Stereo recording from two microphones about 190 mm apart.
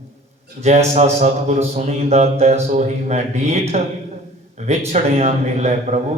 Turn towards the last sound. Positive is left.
turn(degrees=-35)  # may be behind; listen again after turning